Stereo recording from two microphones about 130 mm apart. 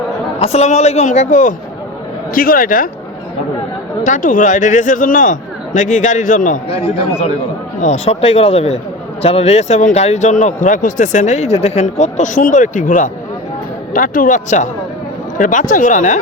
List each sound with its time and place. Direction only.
0.3 s speech: 50° left (ahead or behind); by 1.5 s 75° left (ahead or behind)
2.3 s speech: 90° left
4.0 s a man's voice: 75° left (ahead or behind)
6.7 s a man's voice: 55° left (ahead or behind); by 14.7 s 70° left (ahead or behind)
15.4 s a man's voice: 80° left